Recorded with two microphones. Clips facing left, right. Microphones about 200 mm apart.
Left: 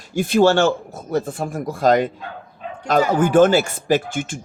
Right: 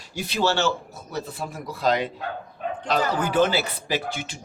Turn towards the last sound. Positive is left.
turn(degrees=50)  # may be behind; listen again after turning